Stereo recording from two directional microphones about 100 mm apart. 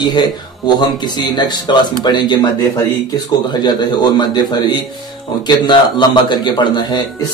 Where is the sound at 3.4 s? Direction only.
45° left (ahead or behind).